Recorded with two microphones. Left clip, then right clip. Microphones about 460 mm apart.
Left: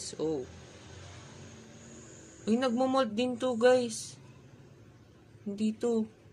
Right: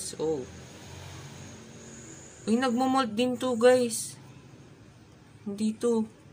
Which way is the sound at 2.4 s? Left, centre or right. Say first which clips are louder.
Right 2 dB; left.